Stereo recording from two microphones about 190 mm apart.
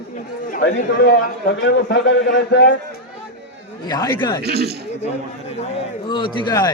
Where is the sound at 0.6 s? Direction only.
65° left (ahead or behind).